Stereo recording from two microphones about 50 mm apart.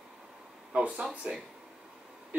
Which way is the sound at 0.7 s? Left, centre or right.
Centre.